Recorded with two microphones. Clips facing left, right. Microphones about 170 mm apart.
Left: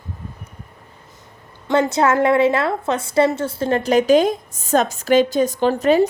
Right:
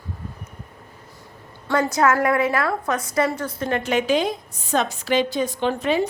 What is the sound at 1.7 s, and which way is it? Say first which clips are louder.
A woman's voice: left 3 dB; 25° left (ahead or behind).